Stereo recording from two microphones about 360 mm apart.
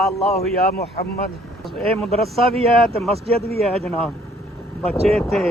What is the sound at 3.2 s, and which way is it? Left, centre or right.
Speech, centre.